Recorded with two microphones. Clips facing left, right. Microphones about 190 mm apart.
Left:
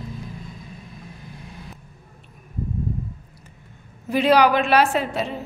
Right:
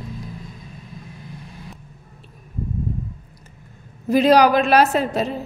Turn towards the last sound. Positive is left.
turn(degrees=-40)  # may be behind; listen again after turning